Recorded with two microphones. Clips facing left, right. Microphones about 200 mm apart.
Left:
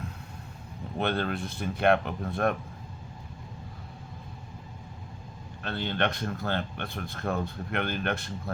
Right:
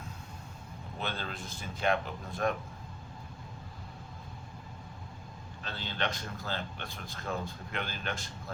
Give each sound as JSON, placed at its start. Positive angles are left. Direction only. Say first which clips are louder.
{"t": 0.9, "sound": "speech", "louder": "left 10 dB", "side_deg": 60}
{"t": 5.6, "sound": "speech", "louder": "left 7 dB", "side_deg": 60}